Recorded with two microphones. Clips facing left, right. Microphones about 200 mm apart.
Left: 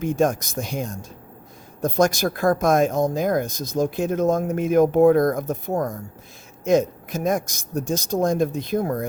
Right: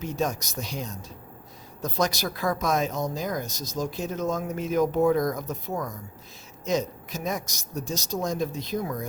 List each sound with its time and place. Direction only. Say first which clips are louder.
0.0 s speech: left 8 dB; 50° left (ahead or behind)